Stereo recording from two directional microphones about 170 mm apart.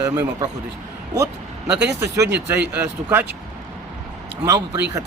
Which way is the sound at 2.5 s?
10° right (ahead or behind).